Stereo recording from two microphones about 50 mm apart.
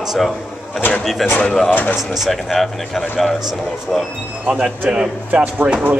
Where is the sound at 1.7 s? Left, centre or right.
Left.